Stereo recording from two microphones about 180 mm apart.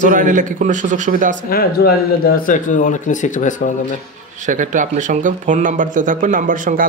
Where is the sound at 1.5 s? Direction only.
55° left (ahead or behind).